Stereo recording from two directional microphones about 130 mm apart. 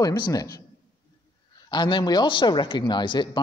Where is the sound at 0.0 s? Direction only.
30° left (ahead or behind).